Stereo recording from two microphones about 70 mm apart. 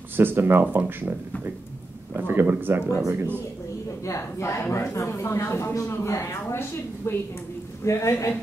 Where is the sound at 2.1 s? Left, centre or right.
Right.